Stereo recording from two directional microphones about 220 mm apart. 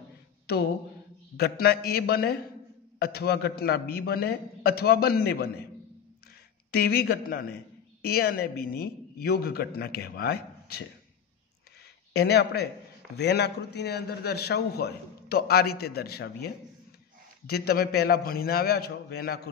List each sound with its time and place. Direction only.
1.3 s a man's voice: 45° left (ahead or behind)
6.7 s a man's voice: 45° left (ahead or behind)
12.1 s a man's voice: 45° left (ahead or behind)